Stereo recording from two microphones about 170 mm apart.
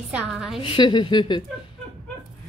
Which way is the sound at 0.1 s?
5° right (ahead or behind).